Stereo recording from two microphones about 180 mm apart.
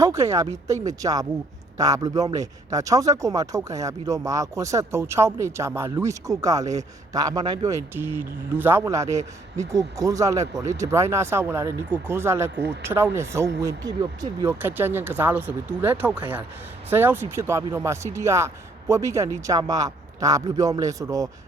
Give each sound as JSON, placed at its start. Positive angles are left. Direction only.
{"t": 0.0, "sound": "a man's voice", "side_deg": -15}